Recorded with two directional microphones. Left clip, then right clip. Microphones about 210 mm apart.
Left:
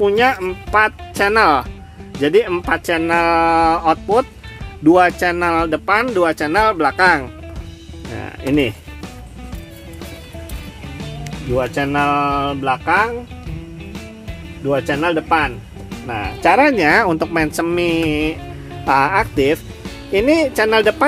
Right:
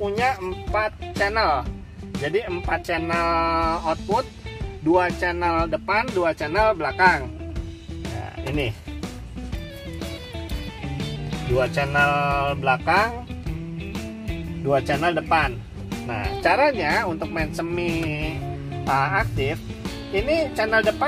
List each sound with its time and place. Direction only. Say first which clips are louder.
0.0 s speech: left 9 dB; 50° left (ahead or behind)
11.0 s music: left 3 dB; centre (ahead or behind)
11.9 s mantra: left 5 dB; 30° left (ahead or behind)
14.7 s speech: left 4 dB; 30° left (ahead or behind)
16.4 s speech: left 7 dB; 45° left (ahead or behind)